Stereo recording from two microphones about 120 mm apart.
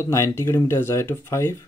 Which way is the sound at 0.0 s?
20° left (ahead or behind).